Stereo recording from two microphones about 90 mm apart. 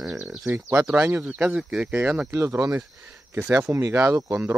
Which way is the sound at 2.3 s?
30° right (ahead or behind).